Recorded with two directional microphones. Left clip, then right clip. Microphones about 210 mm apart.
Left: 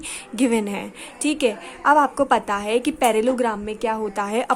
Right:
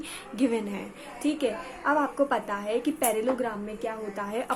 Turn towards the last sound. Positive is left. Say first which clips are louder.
# left 9 dB
turn(degrees=35)  # may be behind; listen again after turning